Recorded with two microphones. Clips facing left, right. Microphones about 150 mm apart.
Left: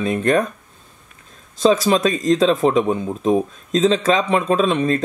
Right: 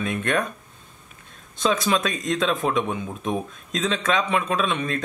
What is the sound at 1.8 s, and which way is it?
Speech, 40° left (ahead or behind).